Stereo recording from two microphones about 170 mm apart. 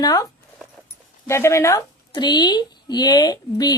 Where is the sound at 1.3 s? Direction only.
15° left (ahead or behind).